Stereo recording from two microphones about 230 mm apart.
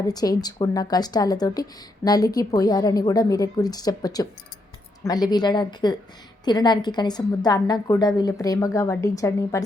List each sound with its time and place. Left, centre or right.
0.0 s a woman's voice: centre